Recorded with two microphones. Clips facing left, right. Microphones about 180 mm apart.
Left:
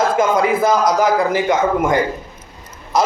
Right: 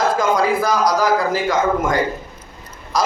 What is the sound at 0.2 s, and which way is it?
A man's voice, 25° left (ahead or behind).